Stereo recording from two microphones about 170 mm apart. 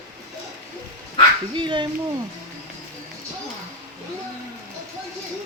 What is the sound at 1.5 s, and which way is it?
Speech, 30° right (ahead or behind).